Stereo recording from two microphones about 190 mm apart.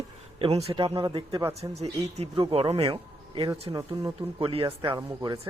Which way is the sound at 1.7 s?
35° right (ahead or behind).